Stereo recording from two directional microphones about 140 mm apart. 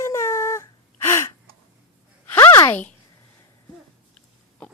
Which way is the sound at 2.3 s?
20° left (ahead or behind).